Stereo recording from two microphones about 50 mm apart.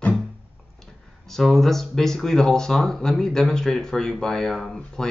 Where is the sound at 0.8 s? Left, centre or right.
Centre.